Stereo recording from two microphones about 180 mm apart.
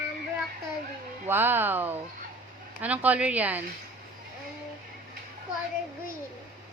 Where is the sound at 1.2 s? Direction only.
10° right (ahead or behind).